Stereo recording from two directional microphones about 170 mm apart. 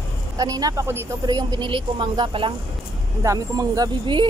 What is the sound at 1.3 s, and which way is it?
Speech, 25° right (ahead or behind).